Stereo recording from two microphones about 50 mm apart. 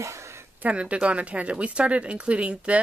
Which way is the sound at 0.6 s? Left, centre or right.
Right.